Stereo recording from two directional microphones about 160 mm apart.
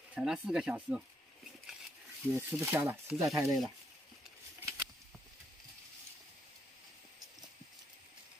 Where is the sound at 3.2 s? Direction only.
20° right (ahead or behind).